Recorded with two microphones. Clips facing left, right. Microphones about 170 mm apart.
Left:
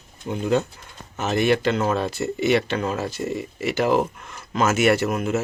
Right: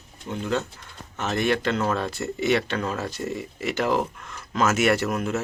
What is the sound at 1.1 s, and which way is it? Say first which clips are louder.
Speech: left 4 dB; 5° left (ahead or behind).